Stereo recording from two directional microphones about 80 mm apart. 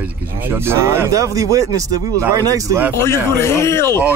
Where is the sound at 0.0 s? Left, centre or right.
Right.